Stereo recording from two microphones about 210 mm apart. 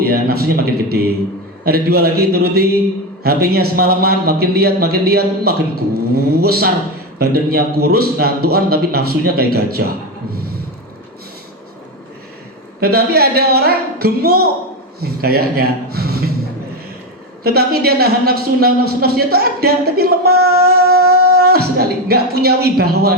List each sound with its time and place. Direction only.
0.0 s speech: 45° right (ahead or behind)
12.8 s speech: 45° right (ahead or behind)
17.4 s speech: 45° right (ahead or behind)